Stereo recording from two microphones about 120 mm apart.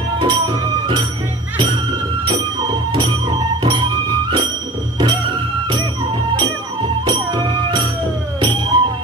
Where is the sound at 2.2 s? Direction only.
40° right (ahead or behind).